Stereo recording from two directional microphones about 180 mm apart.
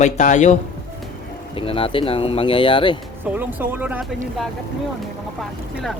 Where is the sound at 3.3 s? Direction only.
10° right (ahead or behind).